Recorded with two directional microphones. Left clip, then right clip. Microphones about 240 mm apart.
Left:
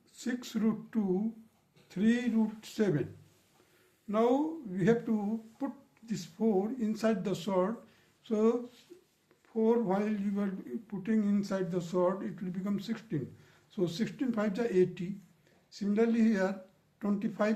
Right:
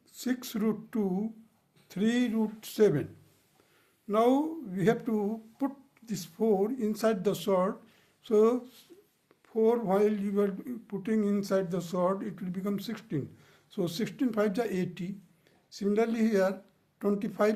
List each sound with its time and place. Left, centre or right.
0.2 s speech: right
4.1 s speech: right